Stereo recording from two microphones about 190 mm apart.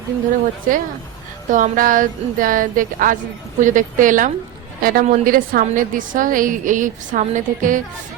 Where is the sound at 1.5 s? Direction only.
45° right (ahead or behind).